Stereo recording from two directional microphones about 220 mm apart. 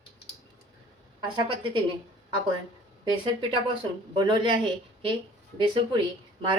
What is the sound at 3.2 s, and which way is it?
A woman's voice, 20° right (ahead or behind).